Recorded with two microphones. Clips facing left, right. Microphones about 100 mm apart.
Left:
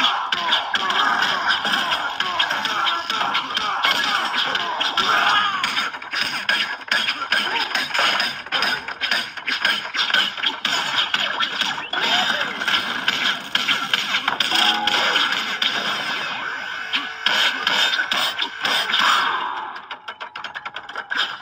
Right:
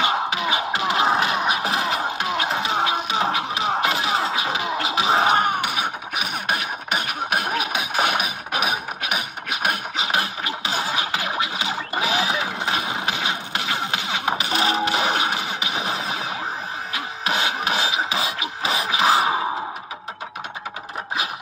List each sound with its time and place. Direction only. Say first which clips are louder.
0.0 s music: right 1 dB; 10° right (ahead or behind)